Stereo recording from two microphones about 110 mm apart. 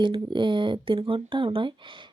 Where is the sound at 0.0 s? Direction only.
45° right (ahead or behind).